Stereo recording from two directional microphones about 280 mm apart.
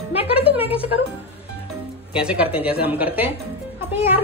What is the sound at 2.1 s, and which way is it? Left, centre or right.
Speech, centre.